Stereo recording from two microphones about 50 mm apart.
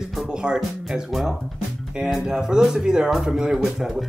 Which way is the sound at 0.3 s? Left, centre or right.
Centre.